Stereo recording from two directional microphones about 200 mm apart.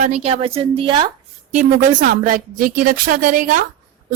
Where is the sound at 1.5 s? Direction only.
40° right (ahead or behind).